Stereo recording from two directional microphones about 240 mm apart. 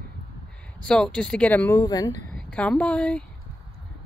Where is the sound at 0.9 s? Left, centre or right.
Centre.